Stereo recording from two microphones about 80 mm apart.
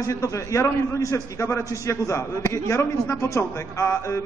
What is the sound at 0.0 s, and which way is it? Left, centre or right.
A man's voice, left.